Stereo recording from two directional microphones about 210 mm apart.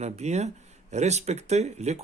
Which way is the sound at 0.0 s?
30° right (ahead or behind).